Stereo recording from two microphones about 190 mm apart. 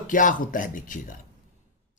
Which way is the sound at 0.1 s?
45° left (ahead or behind).